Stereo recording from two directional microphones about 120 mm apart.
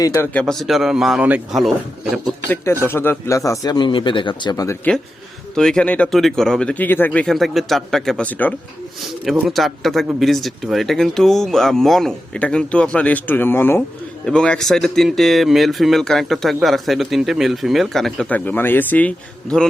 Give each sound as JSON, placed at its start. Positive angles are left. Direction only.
{"t": 0.0, "sound": "speech", "side_deg": 30}
{"t": 0.3, "sound": "speech", "side_deg": 5}
{"t": 2.8, "sound": "speech", "side_deg": 20}
{"t": 4.9, "sound": "a man's voice", "side_deg": 10}
{"t": 9.5, "sound": "speech", "side_deg": 0}
{"t": 14.3, "sound": "speech", "side_deg": 5}